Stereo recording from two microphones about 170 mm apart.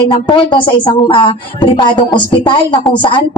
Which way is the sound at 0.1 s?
25° left (ahead or behind).